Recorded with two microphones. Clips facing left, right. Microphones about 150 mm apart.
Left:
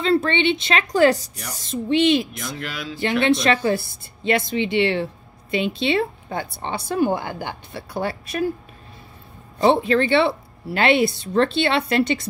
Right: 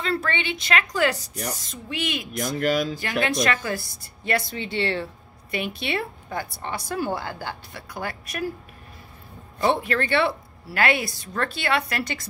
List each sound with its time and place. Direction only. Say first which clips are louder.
0.0 s a woman's voice: left 8 dB; 25° left (ahead or behind)
2.3 s speech: right 8 dB; 45° right (ahead or behind)
3.3 s a woman's voice: left 8 dB; 25° left (ahead or behind)
9.6 s a woman's voice: left 6 dB; 25° left (ahead or behind)